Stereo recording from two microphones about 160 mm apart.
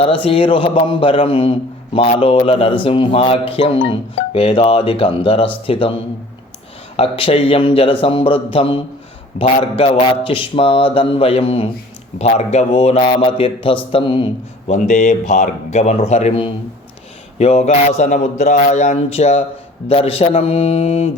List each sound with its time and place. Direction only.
0.0 s a man's voice: 35° left (ahead or behind)
6.9 s a man's voice: 35° left (ahead or behind)
14.7 s a man's voice: 45° left (ahead or behind)